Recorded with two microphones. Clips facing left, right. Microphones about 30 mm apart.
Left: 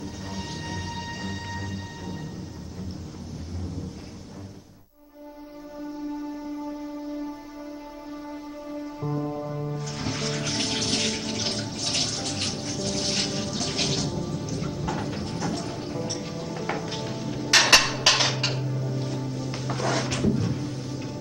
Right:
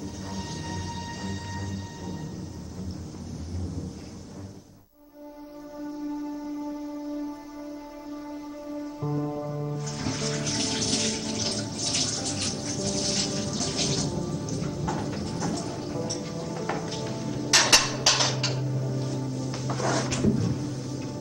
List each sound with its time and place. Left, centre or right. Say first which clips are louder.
0.3 s music: left 2 dB; left
8.7 s music: even; centre